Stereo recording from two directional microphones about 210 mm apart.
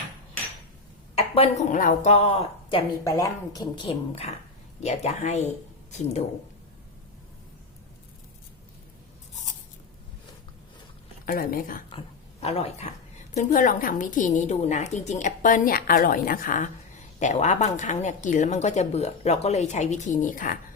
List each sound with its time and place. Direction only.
1.4 s a woman's voice: 35° left (ahead or behind)
3.0 s a woman's voice: 15° left (ahead or behind); by 5.5 s 30° left (ahead or behind)
11.3 s speech: 45° left (ahead or behind)
11.9 s a woman's voice: 25° left (ahead or behind)